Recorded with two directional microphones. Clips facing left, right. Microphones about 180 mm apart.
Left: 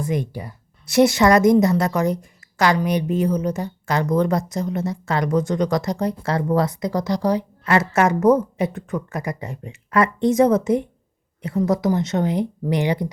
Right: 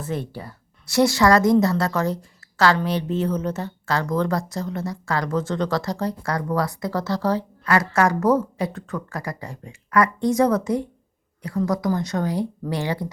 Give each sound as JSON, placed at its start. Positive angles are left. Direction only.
{"t": 0.0, "sound": "a woman's voice", "side_deg": 15}